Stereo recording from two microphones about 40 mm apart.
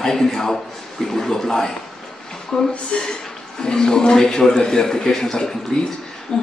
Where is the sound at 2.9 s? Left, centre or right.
Left.